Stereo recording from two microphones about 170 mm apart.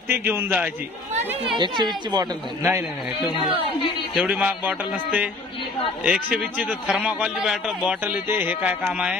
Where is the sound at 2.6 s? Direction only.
15° right (ahead or behind).